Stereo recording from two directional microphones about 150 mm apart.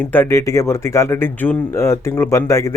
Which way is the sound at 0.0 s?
15° left (ahead or behind).